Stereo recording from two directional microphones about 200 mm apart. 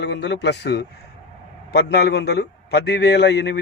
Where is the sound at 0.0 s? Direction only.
60° left (ahead or behind).